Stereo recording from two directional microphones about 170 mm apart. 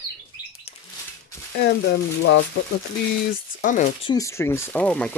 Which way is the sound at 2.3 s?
90° left.